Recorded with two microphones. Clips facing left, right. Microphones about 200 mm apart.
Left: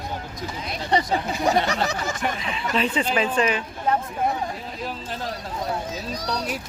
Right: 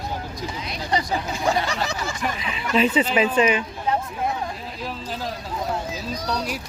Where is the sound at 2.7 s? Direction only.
5° right (ahead or behind).